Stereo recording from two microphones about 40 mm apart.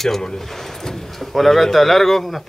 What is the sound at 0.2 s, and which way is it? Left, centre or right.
Speech, centre.